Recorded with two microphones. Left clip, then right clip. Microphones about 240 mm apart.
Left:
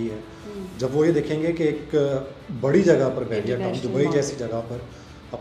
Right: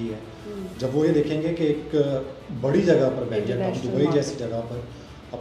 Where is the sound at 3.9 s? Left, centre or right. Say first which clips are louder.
Left 1 dB; left.